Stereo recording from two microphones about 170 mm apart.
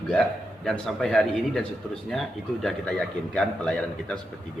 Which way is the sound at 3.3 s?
5° left (ahead or behind).